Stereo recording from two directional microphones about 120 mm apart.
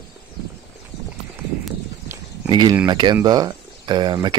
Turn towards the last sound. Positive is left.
turn(degrees=-40)  # may be behind; listen again after turning